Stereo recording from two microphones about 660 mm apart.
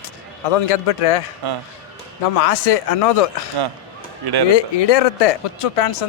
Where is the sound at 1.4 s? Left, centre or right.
Right.